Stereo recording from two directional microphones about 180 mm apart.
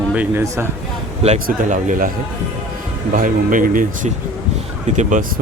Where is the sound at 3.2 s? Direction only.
50° right (ahead or behind).